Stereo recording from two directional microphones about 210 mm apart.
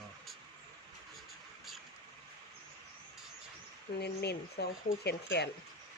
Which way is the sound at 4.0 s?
50° left (ahead or behind).